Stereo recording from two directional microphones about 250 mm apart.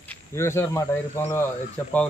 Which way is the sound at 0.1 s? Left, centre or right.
Centre.